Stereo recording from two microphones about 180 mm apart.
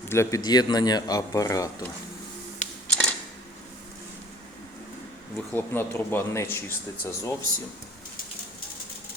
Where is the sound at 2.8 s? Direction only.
5° left (ahead or behind).